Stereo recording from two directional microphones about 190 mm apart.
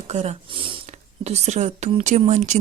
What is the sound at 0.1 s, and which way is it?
Speech, 35° right (ahead or behind).